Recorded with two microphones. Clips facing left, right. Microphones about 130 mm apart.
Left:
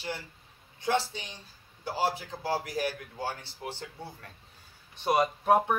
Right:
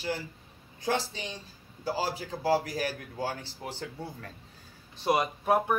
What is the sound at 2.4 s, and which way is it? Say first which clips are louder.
Speech: right 5 dB; 35° right (ahead or behind).